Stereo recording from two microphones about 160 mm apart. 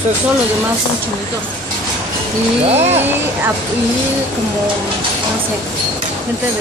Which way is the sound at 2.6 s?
40° right (ahead or behind).